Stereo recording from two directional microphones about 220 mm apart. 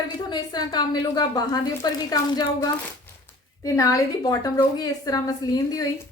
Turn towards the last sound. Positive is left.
turn(degrees=15)  # may be behind; listen again after turning